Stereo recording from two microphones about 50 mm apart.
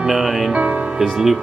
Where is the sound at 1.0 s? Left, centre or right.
Centre.